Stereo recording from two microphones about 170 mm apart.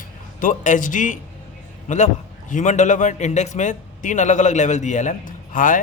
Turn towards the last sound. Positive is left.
turn(degrees=50)  # may be behind; listen again after turning